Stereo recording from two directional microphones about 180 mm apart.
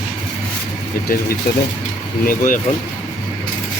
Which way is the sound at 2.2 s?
50° left (ahead or behind).